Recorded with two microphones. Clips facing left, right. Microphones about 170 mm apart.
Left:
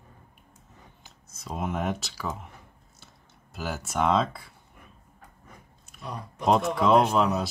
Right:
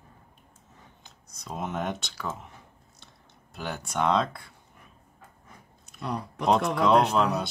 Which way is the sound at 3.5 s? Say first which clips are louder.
Left 1 dB; centre (ahead or behind).